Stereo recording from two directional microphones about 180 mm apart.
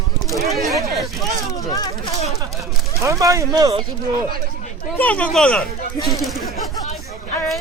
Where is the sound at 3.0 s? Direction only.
15° right (ahead or behind).